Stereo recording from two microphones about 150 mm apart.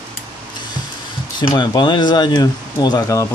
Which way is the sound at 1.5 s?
30° left (ahead or behind).